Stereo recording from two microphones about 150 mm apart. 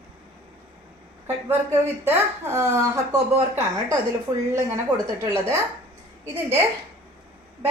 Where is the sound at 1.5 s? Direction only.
15° right (ahead or behind).